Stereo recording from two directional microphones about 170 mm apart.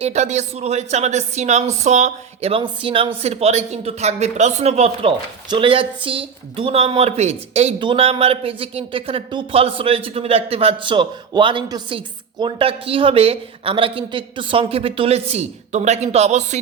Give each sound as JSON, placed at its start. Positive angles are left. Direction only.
{"t": 0.0, "sound": "speech", "side_deg": -40}